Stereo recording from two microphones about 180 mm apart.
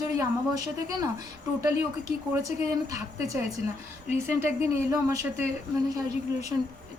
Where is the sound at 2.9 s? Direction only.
20° right (ahead or behind).